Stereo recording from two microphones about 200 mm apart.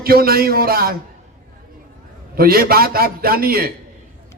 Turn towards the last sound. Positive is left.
turn(degrees=-50)  # may be behind; listen again after turning